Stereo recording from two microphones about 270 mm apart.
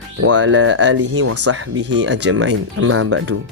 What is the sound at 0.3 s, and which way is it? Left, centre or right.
Speech, right.